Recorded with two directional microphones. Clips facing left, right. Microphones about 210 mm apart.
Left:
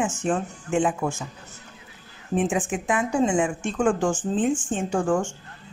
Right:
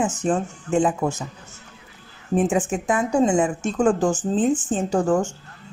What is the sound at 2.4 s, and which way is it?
Speech, 40° right (ahead or behind).